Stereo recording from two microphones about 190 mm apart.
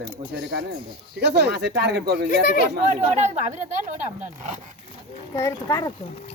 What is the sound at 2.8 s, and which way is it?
Speech, 40° right (ahead or behind).